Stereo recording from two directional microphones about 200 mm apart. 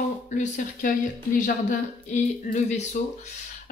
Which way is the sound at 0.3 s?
40° left (ahead or behind).